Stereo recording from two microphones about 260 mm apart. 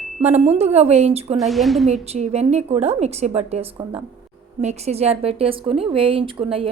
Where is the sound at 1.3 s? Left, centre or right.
Centre.